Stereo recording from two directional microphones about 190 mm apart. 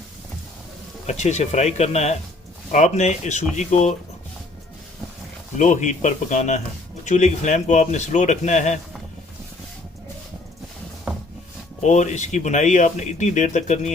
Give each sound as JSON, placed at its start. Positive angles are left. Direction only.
{"t": 1.0, "sound": "speech", "side_deg": 35}
{"t": 5.5, "sound": "speech", "side_deg": 40}
{"t": 11.8, "sound": "speech", "side_deg": 40}